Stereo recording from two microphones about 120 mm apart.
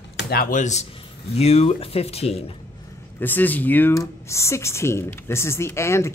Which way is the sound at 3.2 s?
15° left (ahead or behind).